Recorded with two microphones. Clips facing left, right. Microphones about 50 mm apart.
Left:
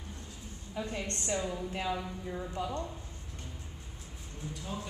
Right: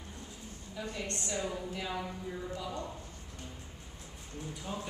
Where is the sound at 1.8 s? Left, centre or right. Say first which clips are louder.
Left 5 dB; centre.